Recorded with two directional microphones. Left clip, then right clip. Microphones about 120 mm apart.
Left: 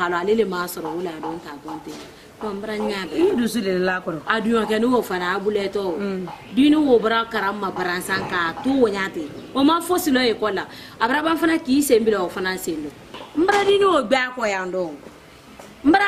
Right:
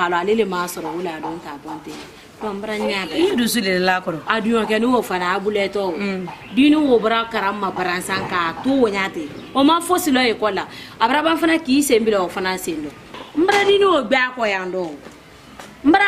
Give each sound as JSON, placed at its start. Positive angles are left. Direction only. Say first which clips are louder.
{"t": 0.0, "sound": "a woman's voice", "louder": "right 2 dB", "side_deg": 0}
{"t": 2.4, "sound": "a woman's voice", "louder": "right 3 dB", "side_deg": 0}
{"t": 3.2, "sound": "a man's voice", "louder": "even", "side_deg": -15}
{"t": 4.3, "sound": "a woman's voice", "louder": "right 2 dB", "side_deg": 5}
{"t": 13.4, "sound": "speech", "louder": "right 2 dB", "side_deg": 15}